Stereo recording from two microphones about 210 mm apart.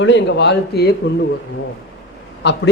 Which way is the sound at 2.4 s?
55° left (ahead or behind).